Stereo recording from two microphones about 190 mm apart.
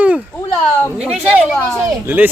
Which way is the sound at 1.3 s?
5° right (ahead or behind).